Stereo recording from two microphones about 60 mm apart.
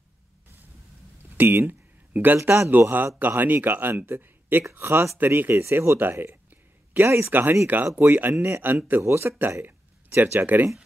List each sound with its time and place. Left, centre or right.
1.3 s a sound: right
2.3 s speech: right
3.2 s speech: right
5.5 s speech: right
5.9 s a sound: right
7.0 s speech: right
7.2 s speech: right
9.6 s a sound: right
10.4 s speech: right